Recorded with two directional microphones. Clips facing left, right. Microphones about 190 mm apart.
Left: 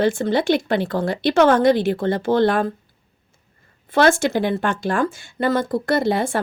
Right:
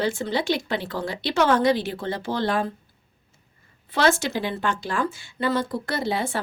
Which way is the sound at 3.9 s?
50° left (ahead or behind).